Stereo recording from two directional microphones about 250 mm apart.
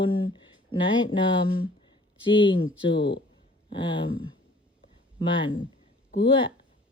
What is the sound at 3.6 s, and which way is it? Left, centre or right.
Speech, centre.